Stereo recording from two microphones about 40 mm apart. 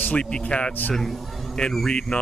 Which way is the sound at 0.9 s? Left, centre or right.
Centre.